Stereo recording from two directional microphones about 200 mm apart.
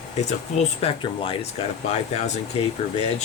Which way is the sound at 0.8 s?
30° left (ahead or behind).